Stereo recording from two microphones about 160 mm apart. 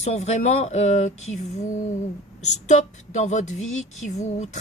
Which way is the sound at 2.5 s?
45° left (ahead or behind).